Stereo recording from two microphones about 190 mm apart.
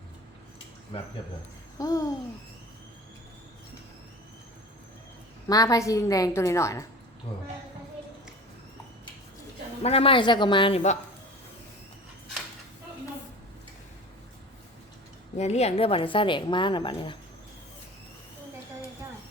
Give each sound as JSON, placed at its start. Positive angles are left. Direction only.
{"t": 0.9, "sound": "a woman's voice", "side_deg": 25}
{"t": 1.8, "sound": "a woman's voice", "side_deg": 15}
{"t": 5.5, "sound": "a woman's voice", "side_deg": 20}
{"t": 9.8, "sound": "a woman's voice", "side_deg": 30}
{"t": 15.4, "sound": "a woman's voice", "side_deg": 35}